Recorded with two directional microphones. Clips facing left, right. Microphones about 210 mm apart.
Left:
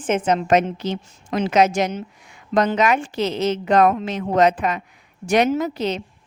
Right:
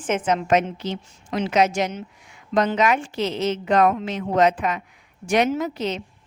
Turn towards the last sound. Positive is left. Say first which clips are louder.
# left 3 dB
turn(degrees=35)  # may be behind; listen again after turning